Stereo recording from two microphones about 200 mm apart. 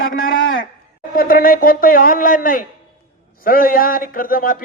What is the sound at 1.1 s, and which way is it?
A man's voice, 45° left (ahead or behind).